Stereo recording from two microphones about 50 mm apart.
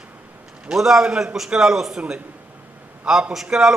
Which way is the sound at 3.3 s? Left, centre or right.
Centre.